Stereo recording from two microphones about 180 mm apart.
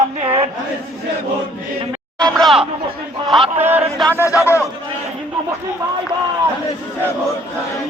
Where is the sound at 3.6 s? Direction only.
10° right (ahead or behind).